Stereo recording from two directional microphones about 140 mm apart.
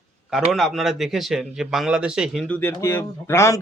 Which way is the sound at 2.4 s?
10° left (ahead or behind).